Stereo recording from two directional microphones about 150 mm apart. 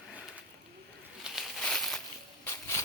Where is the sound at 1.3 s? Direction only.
Centre (ahead or behind).